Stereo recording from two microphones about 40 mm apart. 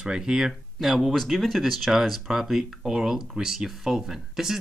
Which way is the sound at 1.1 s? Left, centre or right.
Centre.